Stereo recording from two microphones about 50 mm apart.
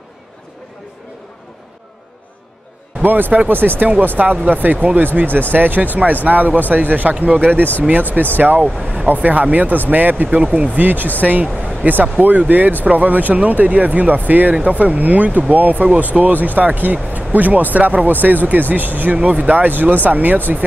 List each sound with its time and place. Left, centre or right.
3.0 s speech: right